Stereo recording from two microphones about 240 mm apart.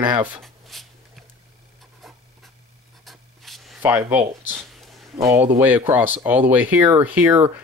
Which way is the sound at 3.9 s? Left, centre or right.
Centre.